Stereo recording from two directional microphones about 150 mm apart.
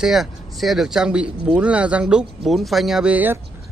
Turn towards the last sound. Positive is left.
turn(degrees=-10)  # may be behind; listen again after turning